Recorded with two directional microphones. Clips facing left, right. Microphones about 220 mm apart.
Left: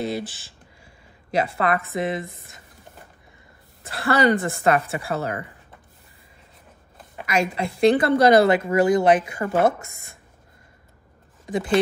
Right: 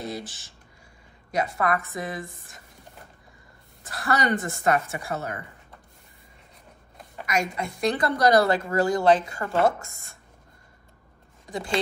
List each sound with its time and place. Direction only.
0.0 s a woman's voice: 30° left (ahead or behind)
3.8 s a woman's voice: 30° left (ahead or behind)
7.2 s a woman's voice: 30° left (ahead or behind)